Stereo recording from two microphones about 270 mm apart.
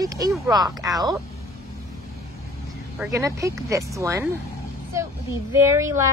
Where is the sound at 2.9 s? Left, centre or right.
Centre.